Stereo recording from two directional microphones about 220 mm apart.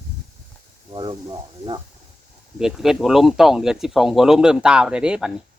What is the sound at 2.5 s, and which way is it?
Speech, centre (ahead or behind).